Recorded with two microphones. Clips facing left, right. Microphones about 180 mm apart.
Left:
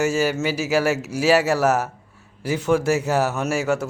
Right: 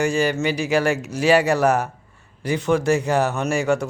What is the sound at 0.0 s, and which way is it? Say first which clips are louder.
Speech: right 1 dB; 5° left (ahead or behind).